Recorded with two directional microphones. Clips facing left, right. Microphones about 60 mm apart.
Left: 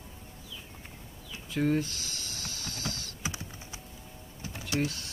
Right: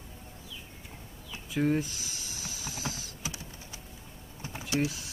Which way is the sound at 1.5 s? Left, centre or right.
Centre.